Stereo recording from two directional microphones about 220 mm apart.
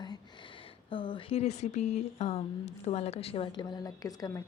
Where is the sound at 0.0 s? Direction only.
20° left (ahead or behind).